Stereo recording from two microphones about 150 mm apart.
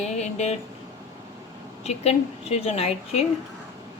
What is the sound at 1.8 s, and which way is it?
A woman's voice, 45° left (ahead or behind).